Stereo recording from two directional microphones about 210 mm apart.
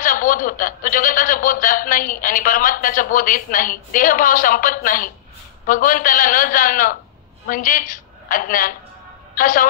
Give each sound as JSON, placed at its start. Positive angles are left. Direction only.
{"t": 0.0, "sound": "a man's voice", "side_deg": 40}